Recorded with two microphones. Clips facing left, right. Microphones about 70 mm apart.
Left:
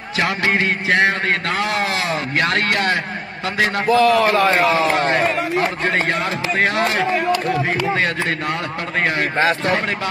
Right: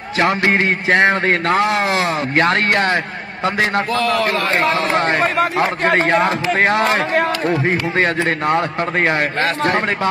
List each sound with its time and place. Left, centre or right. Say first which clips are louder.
0.2 s a man's voice: right 3 dB; right
3.9 s a man's voice: left 3 dB; centre
5.0 s a man's voice: right 2 dB; right
5.6 s a man's voice: right 4 dB; right
8.0 s a man's voice: right 4 dB; right